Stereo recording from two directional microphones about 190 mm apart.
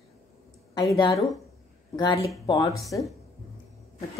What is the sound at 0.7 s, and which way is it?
Speech, 20° left (ahead or behind).